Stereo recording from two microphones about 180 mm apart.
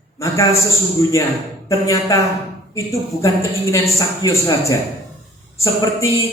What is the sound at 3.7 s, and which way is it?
A man's voice, 20° left (ahead or behind).